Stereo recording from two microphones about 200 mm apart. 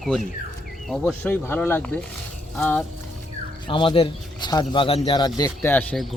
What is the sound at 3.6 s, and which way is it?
A man's voice, 25° left (ahead or behind).